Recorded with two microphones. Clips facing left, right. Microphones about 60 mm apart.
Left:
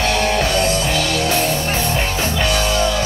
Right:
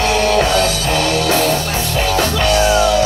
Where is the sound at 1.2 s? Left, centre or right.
Right.